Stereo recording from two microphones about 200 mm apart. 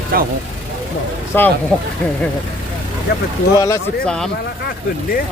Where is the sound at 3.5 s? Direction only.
15° left (ahead or behind).